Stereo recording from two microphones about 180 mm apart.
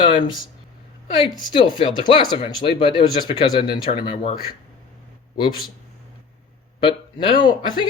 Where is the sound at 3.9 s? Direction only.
45° left (ahead or behind).